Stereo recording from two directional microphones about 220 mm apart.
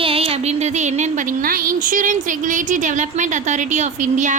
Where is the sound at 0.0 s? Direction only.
25° right (ahead or behind).